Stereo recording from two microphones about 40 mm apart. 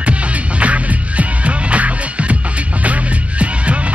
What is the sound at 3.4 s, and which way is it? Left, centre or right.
Music, right.